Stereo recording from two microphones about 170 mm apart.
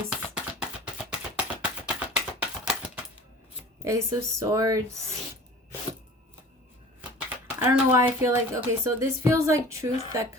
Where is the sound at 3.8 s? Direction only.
15° right (ahead or behind).